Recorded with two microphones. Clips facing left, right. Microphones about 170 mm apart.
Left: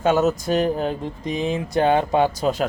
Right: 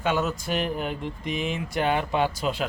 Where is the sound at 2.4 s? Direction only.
40° left (ahead or behind).